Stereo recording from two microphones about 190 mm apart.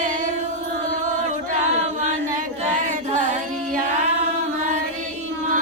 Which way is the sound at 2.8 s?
40° right (ahead or behind).